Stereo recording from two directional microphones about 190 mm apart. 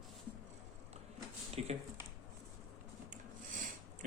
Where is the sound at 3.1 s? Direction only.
45° right (ahead or behind).